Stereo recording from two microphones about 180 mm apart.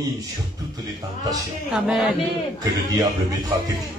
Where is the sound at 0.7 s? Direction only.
20° right (ahead or behind).